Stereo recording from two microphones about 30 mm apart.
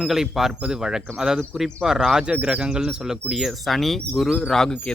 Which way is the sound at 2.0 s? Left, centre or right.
Centre.